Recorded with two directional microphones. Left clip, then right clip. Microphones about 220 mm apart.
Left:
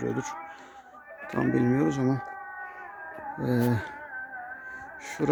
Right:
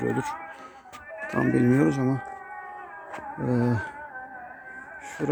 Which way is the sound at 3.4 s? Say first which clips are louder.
Right 1 dB; 45° left (ahead or behind).